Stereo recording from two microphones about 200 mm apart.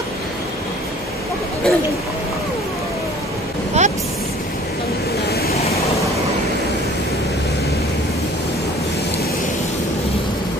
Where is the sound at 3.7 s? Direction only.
35° right (ahead or behind).